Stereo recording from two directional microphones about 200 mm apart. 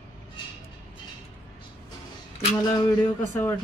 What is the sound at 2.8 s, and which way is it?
Speech, 15° left (ahead or behind).